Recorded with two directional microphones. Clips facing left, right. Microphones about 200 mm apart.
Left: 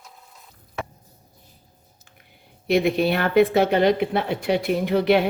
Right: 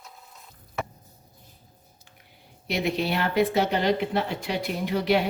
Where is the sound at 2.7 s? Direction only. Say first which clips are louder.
Left 7 dB; 55° left (ahead or behind).